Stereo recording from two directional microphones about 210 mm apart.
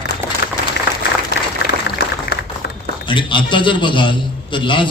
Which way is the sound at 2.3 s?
50° left (ahead or behind).